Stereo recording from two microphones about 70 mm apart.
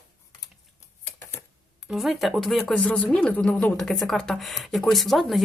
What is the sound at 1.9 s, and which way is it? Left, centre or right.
Speech, centre.